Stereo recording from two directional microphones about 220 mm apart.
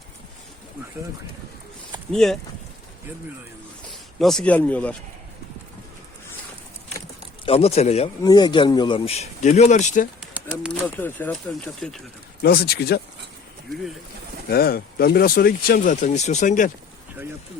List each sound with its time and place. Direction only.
2.1 s speech: centre (ahead or behind)
4.2 s speech: centre (ahead or behind)
7.4 s speech: 25° left (ahead or behind)
8.2 s speech: 20° left (ahead or behind); by 10.1 s 35° left (ahead or behind)
10.2 s pigeon: 5° right (ahead or behind)
10.8 s speech: 5° left (ahead or behind)
12.4 s speech: 45° left (ahead or behind)
14.5 s speech: 45° left (ahead or behind)